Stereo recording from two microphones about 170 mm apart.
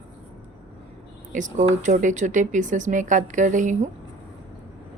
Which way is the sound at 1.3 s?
45° right (ahead or behind).